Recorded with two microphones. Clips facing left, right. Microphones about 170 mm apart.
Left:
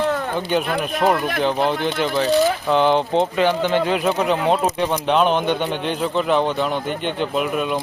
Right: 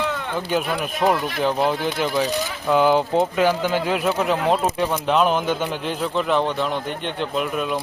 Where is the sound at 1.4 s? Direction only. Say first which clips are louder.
Left 1 dB; centre (ahead or behind).